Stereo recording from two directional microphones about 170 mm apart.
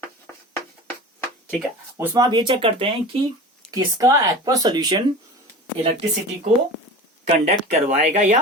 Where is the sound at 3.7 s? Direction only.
20° right (ahead or behind).